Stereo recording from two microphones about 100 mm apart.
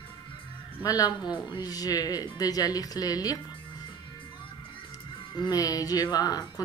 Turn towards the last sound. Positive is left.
turn(degrees=40)  # may be behind; listen again after turning